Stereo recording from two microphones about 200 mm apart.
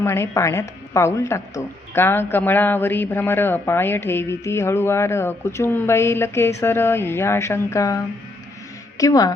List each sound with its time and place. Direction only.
0.0 s a woman's voice: 15° left (ahead or behind)